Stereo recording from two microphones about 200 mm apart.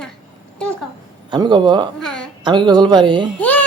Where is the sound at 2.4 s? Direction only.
25° right (ahead or behind).